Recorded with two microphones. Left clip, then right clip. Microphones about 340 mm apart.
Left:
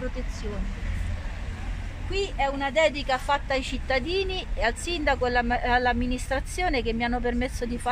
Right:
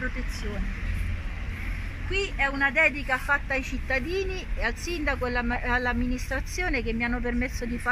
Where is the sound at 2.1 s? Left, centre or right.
Left.